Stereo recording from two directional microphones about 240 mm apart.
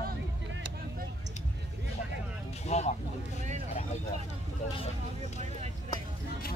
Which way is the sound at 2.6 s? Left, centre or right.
Left.